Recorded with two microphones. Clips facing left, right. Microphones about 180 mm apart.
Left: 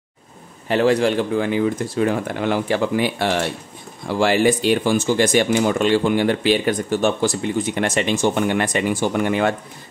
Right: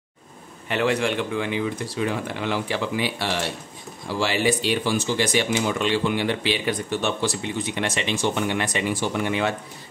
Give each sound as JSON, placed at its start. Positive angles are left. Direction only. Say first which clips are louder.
{"t": 0.7, "sound": "speech", "louder": "left 6 dB", "side_deg": 35}